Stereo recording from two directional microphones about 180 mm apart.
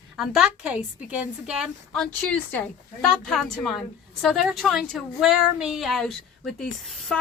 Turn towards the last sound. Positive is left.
turn(degrees=0)  # may be behind; listen again after turning